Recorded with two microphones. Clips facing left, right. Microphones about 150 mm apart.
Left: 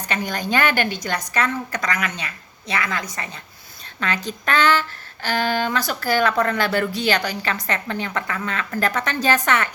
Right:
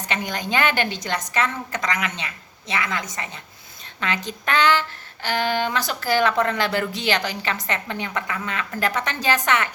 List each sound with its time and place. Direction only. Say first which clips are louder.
0.1 s speech: left 2 dB; 20° right (ahead or behind)